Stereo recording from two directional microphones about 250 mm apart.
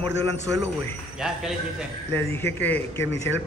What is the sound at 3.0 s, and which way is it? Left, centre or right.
Speech, left.